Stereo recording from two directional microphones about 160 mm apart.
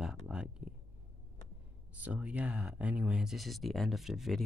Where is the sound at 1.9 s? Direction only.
10° right (ahead or behind).